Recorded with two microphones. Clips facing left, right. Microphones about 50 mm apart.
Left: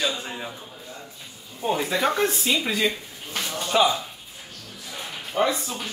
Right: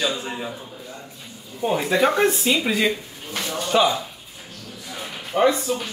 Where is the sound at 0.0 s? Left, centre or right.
Centre.